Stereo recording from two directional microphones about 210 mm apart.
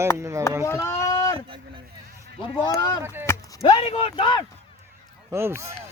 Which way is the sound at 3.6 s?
25° left (ahead or behind).